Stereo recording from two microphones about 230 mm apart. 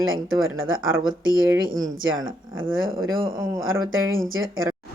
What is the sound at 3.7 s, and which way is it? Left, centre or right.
Speech, right.